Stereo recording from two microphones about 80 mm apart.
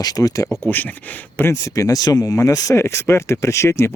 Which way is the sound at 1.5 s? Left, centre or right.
Left.